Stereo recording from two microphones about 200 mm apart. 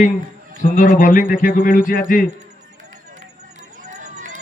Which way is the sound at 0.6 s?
45° left (ahead or behind).